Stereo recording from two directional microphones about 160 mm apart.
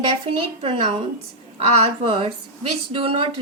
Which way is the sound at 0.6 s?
40° right (ahead or behind).